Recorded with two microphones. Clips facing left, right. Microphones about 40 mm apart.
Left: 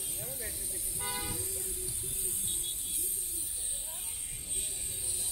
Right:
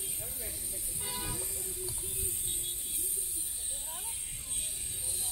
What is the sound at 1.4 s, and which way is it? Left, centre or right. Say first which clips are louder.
Music: left 1 dB; right.